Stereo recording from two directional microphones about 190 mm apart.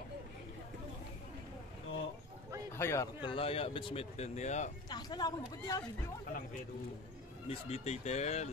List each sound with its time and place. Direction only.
2.8 s a man's voice: 15° left (ahead or behind); by 4.6 s 35° left (ahead or behind)
4.8 s a man's voice: 20° left (ahead or behind)
7.4 s speech: 35° left (ahead or behind)